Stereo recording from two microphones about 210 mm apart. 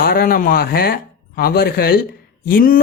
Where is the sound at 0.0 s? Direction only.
45° left (ahead or behind).